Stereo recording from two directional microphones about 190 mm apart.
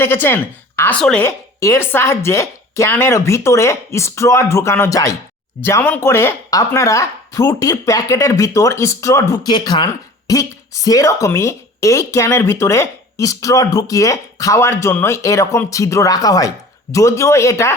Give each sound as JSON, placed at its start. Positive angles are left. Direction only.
{"t": 0.0, "sound": "speech", "side_deg": 10}